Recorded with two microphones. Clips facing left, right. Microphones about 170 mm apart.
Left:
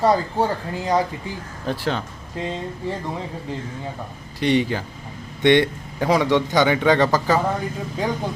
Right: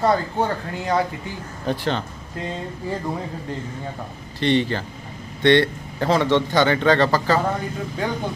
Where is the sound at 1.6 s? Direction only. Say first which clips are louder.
Right 1 dB; 5° left (ahead or behind).